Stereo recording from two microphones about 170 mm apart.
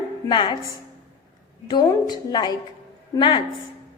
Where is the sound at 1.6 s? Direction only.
25° left (ahead or behind).